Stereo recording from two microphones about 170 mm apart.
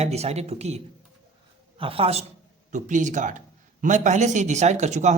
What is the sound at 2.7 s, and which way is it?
Speech, 45° right (ahead or behind).